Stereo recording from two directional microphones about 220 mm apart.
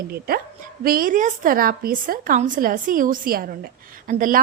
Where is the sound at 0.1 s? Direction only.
45° right (ahead or behind).